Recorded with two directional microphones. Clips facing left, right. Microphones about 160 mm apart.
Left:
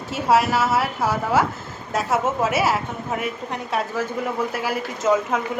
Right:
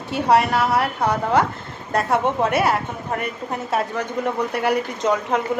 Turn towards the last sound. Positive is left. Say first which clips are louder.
# even
turn(degrees=0)  # may be behind; listen again after turning